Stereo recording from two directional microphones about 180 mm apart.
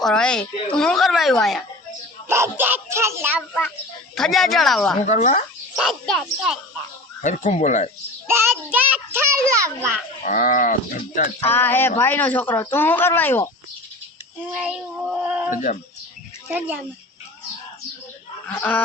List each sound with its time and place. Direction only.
0.0 s speech: 5° left (ahead or behind)
2.3 s a child's voice: 15° right (ahead or behind)
4.1 s speech: centre (ahead or behind)
5.0 s speech: 40° left (ahead or behind)
5.7 s speech: centre (ahead or behind)
7.2 s speech: 45° left (ahead or behind)
8.3 s a child's voice: 10° right (ahead or behind)
10.2 s speech: 45° left (ahead or behind)
11.3 s speech: 10° left (ahead or behind)
14.5 s speech: 5° right (ahead or behind)
15.5 s speech: 40° left (ahead or behind)
16.5 s a child's voice: 10° right (ahead or behind)
18.4 s speech: 10° left (ahead or behind)